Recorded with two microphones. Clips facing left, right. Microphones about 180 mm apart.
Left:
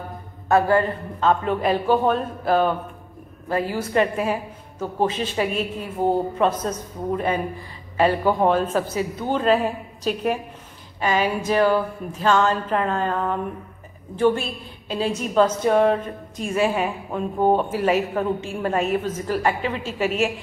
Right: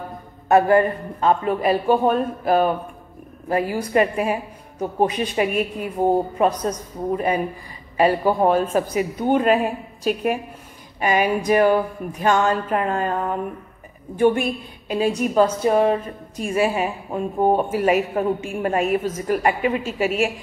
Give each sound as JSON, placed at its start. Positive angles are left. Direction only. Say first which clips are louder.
{"t": 0.5, "sound": "a woman's voice", "louder": "right 3 dB", "side_deg": -20}
{"t": 1.4, "sound": "a woman's voice", "louder": "right 2 dB", "side_deg": -5}